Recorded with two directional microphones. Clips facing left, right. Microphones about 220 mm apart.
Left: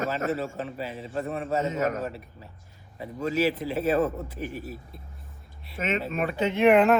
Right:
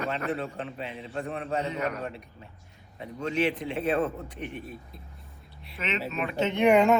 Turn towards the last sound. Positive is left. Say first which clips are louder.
# left 2 dB
turn(degrees=0)  # may be behind; listen again after turning